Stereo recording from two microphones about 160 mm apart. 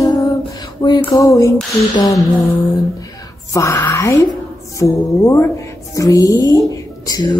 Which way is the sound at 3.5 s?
20° left (ahead or behind).